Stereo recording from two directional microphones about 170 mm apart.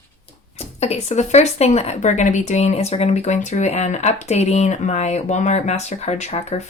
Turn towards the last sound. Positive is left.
turn(degrees=40)  # may be behind; listen again after turning